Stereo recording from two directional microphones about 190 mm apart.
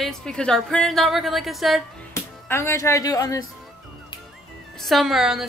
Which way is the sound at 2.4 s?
15° left (ahead or behind).